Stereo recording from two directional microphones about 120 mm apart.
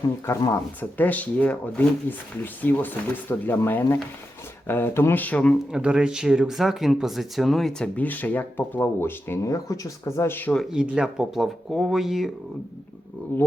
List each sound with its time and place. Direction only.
0.3 s speech: 25° left (ahead or behind)
0.8 s speech: 15° left (ahead or behind)
5.7 s speech: 5° right (ahead or behind); by 10.6 s 15° left (ahead or behind)
10.6 s speech: 5° right (ahead or behind)
13.3 s speech: 15° left (ahead or behind)